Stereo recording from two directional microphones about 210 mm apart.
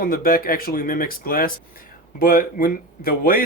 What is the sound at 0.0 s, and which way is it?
Speech, 45° left (ahead or behind).